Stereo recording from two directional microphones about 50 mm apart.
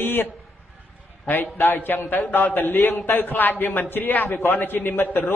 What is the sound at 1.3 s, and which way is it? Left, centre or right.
A man's voice, left.